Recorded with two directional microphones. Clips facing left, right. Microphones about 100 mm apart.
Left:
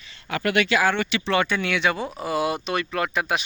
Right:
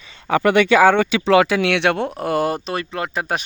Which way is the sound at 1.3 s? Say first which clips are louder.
Right 8 dB; 90° right.